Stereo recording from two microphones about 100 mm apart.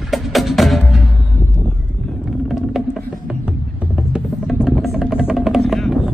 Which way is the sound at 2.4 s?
Centre (ahead or behind).